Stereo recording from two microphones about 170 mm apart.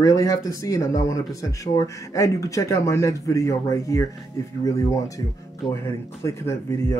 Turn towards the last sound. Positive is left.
turn(degrees=15)  # may be behind; listen again after turning